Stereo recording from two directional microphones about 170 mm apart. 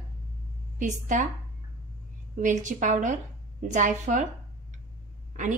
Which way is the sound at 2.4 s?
45° right (ahead or behind).